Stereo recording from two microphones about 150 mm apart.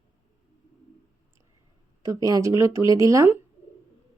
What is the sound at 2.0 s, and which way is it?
Speech, 25° right (ahead or behind).